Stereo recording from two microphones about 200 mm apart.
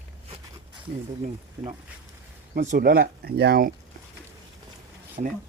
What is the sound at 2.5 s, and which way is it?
Speech, 40° right (ahead or behind).